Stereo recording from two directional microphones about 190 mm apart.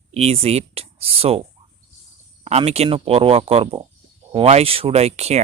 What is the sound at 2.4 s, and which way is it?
Speech, 35° right (ahead or behind).